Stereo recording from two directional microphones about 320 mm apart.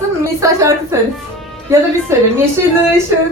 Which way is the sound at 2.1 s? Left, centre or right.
Centre.